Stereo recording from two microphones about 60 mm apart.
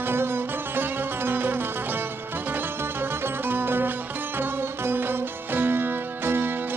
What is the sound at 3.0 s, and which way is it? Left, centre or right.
Music, right.